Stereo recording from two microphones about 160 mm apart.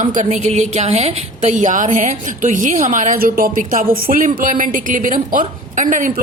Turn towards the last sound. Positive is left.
turn(degrees=-55)  # may be behind; listen again after turning